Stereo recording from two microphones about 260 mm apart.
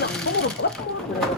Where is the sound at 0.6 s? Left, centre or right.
Left.